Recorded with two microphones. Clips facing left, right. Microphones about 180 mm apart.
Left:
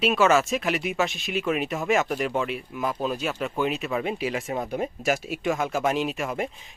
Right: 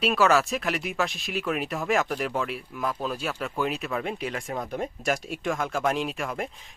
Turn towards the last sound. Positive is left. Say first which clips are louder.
# left 3 dB
turn(degrees=0)  # may be behind; listen again after turning